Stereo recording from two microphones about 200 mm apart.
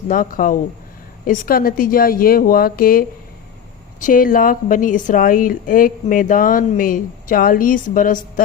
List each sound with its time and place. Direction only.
0.1 s a woman's voice: 45° left (ahead or behind)